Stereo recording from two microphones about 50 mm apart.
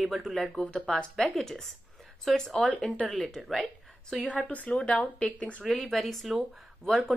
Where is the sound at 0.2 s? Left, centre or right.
Centre.